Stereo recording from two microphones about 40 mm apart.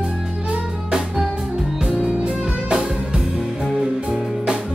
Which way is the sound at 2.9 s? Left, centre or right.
Centre.